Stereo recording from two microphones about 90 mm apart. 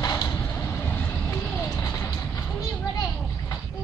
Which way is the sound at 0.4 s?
30° left (ahead or behind).